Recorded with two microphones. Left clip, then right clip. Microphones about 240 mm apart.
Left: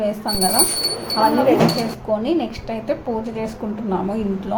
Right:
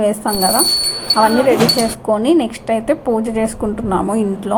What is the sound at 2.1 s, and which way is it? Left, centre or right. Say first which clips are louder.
A woman's voice: right 6 dB; right.